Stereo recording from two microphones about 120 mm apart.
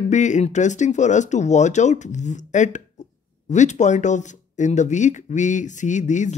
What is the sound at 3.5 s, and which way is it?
Speech, 80° left.